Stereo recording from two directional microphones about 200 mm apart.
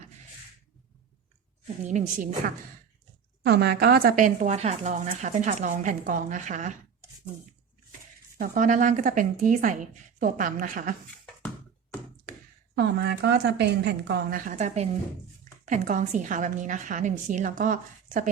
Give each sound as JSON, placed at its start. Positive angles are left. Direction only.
{"t": 1.6, "sound": "a woman's voice", "side_deg": -35}
{"t": 3.4, "sound": "a woman's voice", "side_deg": -55}
{"t": 8.4, "sound": "a woman's voice", "side_deg": -40}
{"t": 12.7, "sound": "a woman's voice", "side_deg": -55}